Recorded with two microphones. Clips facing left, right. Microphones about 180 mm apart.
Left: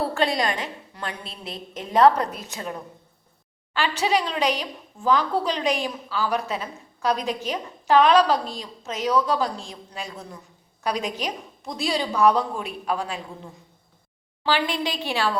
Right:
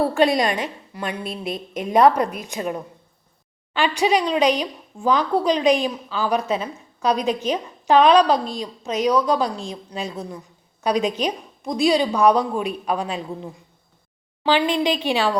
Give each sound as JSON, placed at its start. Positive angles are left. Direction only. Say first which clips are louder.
{"t": 0.1, "sound": "a woman's voice", "louder": "right 5 dB", "side_deg": -20}
{"t": 3.8, "sound": "a woman's voice", "louder": "right 4 dB", "side_deg": -15}